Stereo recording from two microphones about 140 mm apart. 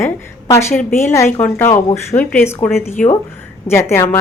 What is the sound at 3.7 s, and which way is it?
Speech, 15° left (ahead or behind).